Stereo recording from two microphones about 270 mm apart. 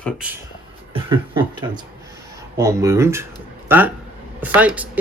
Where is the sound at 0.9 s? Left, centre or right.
Centre.